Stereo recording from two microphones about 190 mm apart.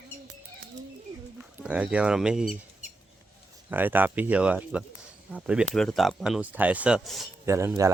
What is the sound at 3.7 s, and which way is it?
Speech, 10° right (ahead or behind).